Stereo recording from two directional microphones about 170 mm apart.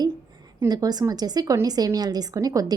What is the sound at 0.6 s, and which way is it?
A woman's voice, 20° right (ahead or behind).